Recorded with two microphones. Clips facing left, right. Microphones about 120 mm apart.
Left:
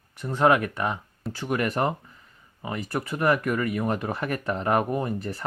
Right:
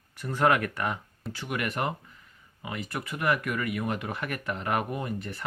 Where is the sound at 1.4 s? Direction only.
35° left (ahead or behind).